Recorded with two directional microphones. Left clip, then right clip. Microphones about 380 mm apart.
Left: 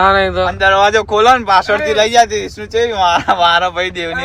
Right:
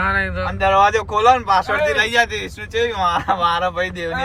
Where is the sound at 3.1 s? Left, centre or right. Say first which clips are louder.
Left 7 dB; left.